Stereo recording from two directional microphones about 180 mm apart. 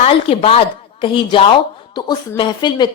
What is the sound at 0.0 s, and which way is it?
A woman's voice, 30° left (ahead or behind).